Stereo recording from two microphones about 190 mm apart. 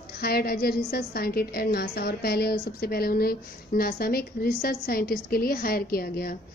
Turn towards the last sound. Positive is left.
turn(degrees=50)  # may be behind; listen again after turning